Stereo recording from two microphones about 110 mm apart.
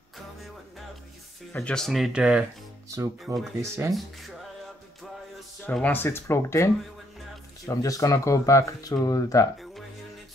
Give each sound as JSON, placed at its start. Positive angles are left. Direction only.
{"t": 1.5, "sound": "speech", "side_deg": 10}
{"t": 3.3, "sound": "speech", "side_deg": -30}
{"t": 3.9, "sound": "speech", "side_deg": 0}
{"t": 5.7, "sound": "speech", "side_deg": 15}